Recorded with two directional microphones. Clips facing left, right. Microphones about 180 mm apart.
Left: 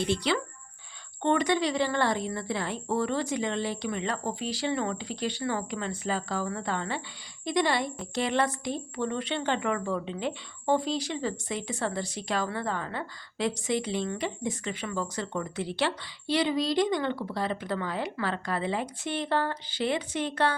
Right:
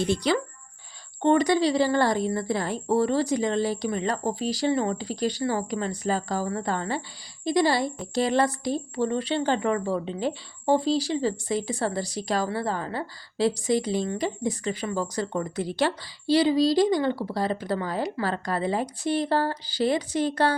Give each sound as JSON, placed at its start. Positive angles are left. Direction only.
{"t": 0.1, "sound": "a woman's voice", "side_deg": -45}